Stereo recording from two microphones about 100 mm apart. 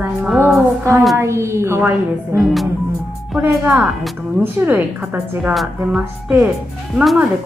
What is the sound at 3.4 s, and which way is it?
A woman's voice, 25° right (ahead or behind).